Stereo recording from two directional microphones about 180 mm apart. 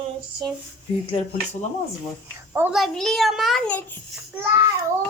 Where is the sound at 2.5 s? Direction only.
10° right (ahead or behind).